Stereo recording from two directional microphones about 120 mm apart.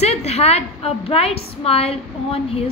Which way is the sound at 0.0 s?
60° left (ahead or behind).